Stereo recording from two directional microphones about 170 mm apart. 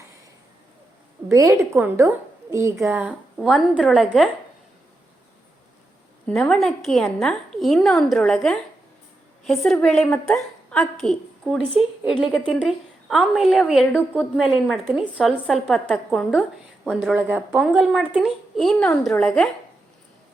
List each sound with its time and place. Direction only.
1.3 s a woman's voice: 20° right (ahead or behind)
2.7 s a woman's voice: 5° right (ahead or behind)
6.2 s a woman's voice: 5° left (ahead or behind)
17.2 s a woman's voice: 10° right (ahead or behind)